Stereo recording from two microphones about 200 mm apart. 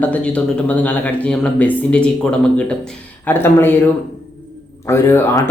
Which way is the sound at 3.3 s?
10° left (ahead or behind).